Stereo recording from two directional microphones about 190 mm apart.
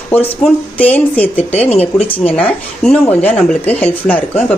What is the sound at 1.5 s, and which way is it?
Speech, 35° left (ahead or behind).